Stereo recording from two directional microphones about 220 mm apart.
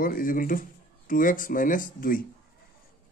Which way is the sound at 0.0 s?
40° left (ahead or behind).